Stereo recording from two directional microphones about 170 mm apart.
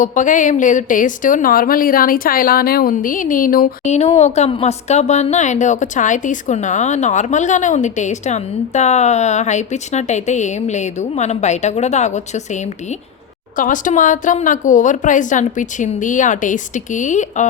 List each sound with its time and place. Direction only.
0.0 s speech: 50° left (ahead or behind)
3.8 s speech: 40° left (ahead or behind)
13.6 s speech: 50° left (ahead or behind)